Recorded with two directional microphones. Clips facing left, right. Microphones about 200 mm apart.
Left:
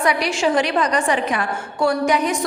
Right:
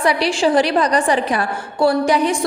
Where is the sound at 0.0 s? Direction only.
30° right (ahead or behind).